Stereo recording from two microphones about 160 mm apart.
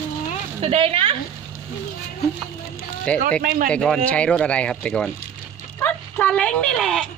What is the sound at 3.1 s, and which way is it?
Speech, 5° left (ahead or behind).